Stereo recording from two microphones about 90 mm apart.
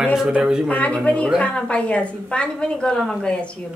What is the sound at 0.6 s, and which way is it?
A woman's voice, 15° left (ahead or behind).